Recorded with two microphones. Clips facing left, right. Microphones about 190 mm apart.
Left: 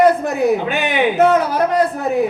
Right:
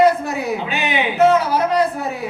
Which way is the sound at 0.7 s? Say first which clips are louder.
Left 3 dB; 50° left (ahead or behind).